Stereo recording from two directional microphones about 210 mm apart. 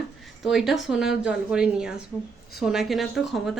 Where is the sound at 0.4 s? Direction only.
Centre (ahead or behind).